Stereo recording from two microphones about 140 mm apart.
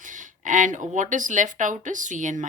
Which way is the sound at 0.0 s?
70° right (ahead or behind).